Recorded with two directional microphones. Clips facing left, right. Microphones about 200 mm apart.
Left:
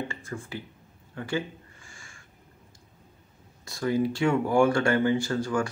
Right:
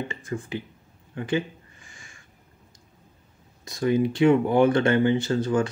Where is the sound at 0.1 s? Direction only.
20° right (ahead or behind).